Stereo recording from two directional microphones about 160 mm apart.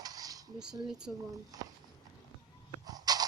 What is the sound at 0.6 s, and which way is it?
Speech, 5° right (ahead or behind).